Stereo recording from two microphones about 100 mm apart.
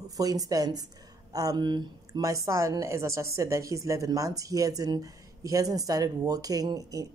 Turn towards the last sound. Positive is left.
turn(degrees=-35)  # may be behind; listen again after turning